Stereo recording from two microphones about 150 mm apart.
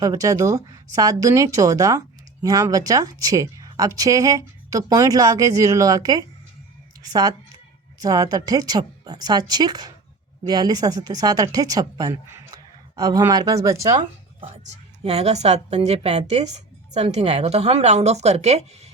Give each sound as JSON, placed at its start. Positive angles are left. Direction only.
{"t": 0.0, "sound": "speech", "side_deg": -25}
{"t": 14.4, "sound": "a woman's voice", "side_deg": -45}